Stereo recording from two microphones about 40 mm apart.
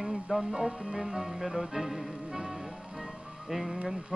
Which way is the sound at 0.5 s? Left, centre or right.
Centre.